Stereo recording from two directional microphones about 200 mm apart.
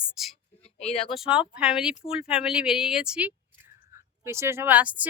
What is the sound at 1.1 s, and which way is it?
Speech, 5° right (ahead or behind).